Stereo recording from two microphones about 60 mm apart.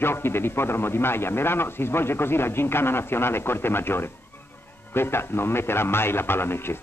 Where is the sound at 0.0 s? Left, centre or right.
Left.